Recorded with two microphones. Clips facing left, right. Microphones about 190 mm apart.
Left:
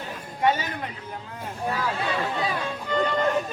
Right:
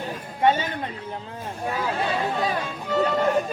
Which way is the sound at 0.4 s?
25° right (ahead or behind).